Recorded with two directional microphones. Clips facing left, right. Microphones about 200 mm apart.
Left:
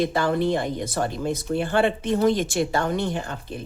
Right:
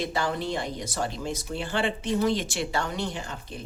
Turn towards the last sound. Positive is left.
turn(degrees=55)  # may be behind; listen again after turning